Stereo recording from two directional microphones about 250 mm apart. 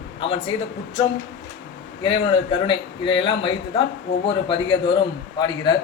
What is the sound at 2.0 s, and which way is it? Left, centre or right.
A man's voice, left.